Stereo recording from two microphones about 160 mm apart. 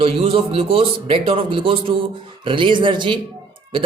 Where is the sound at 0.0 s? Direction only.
35° right (ahead or behind).